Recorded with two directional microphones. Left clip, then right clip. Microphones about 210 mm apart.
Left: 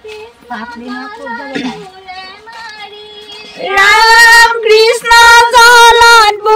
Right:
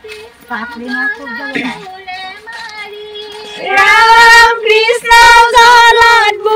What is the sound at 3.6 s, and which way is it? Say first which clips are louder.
Child singing: even; 25° left (ahead or behind).